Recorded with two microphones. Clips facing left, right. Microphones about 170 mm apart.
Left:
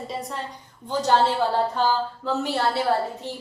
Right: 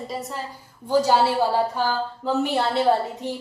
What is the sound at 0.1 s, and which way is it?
A woman's voice, 5° right (ahead or behind).